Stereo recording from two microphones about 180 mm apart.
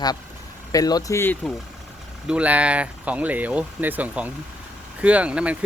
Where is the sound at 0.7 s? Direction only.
20° left (ahead or behind).